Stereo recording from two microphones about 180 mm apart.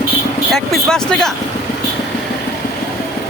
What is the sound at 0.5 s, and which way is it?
Speech, centre (ahead or behind).